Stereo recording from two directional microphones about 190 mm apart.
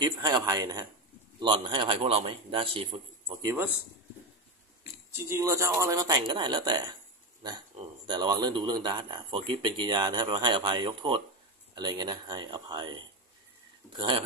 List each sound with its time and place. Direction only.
0.0 s speech: 20° right (ahead or behind)
5.1 s speech: 15° right (ahead or behind)
13.9 s speech: 25° right (ahead or behind)